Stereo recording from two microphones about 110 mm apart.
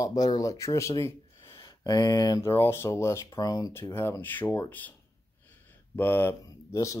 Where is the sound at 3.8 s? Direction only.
20° left (ahead or behind).